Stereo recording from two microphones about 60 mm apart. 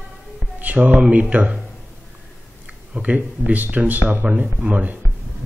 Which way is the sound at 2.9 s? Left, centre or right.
Right.